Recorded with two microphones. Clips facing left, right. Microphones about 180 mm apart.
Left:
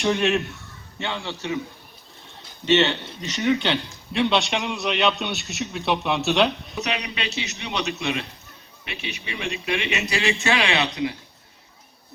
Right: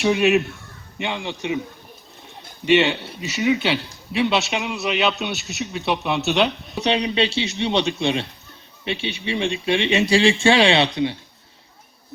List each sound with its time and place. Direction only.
0.0 s a man's voice: 5° right (ahead or behind)
2.6 s speech: 10° right (ahead or behind)
6.7 s speech: 30° right (ahead or behind)